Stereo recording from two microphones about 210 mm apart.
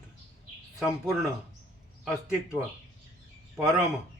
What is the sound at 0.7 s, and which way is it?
Speech, 5° right (ahead or behind).